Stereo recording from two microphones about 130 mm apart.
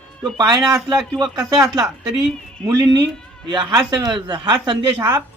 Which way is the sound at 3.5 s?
30° right (ahead or behind).